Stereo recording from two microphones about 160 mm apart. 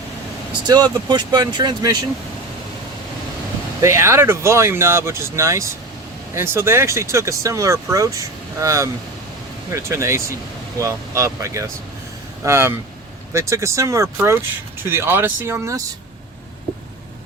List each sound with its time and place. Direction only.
0.7 s speech: 25° right (ahead or behind)
3.8 s speech: 15° right (ahead or behind)